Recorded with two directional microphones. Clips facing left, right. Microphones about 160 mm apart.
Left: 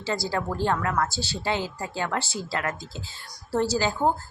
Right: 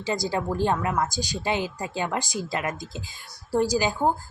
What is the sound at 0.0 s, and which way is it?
A woman's voice, 15° right (ahead or behind).